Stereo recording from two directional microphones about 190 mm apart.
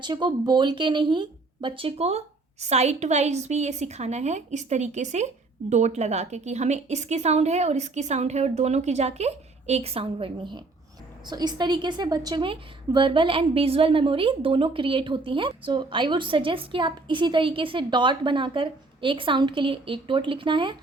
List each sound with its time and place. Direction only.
0.0 s a woman's voice: 25° right (ahead or behind)